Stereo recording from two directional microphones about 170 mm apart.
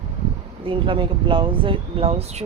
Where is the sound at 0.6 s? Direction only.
30° right (ahead or behind).